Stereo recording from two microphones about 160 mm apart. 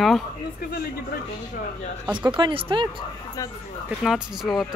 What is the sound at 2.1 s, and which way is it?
Speech, 30° right (ahead or behind).